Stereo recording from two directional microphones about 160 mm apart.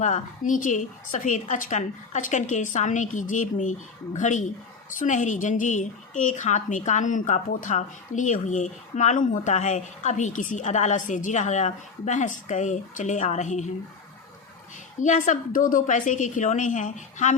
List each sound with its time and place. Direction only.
0.0 s a woman's voice: 50° left (ahead or behind)
15.0 s a woman's voice: 50° left (ahead or behind)